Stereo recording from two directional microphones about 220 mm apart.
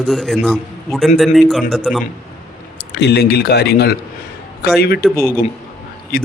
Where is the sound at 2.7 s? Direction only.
50° left (ahead or behind).